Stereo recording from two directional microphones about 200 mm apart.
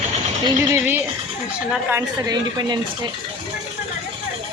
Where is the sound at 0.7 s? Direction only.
10° right (ahead or behind).